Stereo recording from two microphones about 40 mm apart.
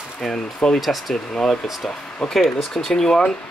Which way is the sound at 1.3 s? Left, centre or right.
Centre.